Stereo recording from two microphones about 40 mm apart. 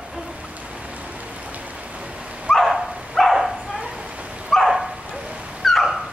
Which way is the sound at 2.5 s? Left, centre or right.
Centre.